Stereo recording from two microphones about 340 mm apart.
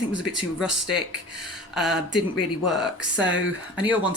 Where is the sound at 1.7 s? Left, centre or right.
Centre.